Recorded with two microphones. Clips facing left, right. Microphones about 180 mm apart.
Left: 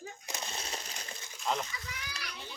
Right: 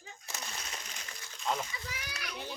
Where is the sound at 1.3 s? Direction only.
Centre (ahead or behind).